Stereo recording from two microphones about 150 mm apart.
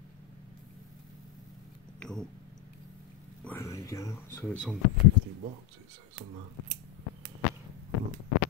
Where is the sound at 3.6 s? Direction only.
20° left (ahead or behind).